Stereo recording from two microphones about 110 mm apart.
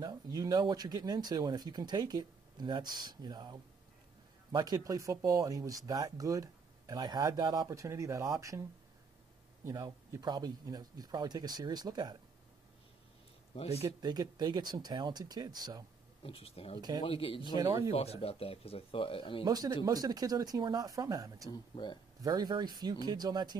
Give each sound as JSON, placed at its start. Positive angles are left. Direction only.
{"t": 0.0, "sound": "speech", "side_deg": -35}
{"t": 10.1, "sound": "speech", "side_deg": -40}
{"t": 13.7, "sound": "speech", "side_deg": -35}
{"t": 16.2, "sound": "a man's voice", "side_deg": 55}
{"t": 17.6, "sound": "speech", "side_deg": -35}
{"t": 17.9, "sound": "speech", "side_deg": 65}
{"t": 19.4, "sound": "speech", "side_deg": -35}
{"t": 21.5, "sound": "a man's voice", "side_deg": 40}
{"t": 22.2, "sound": "speech", "side_deg": -35}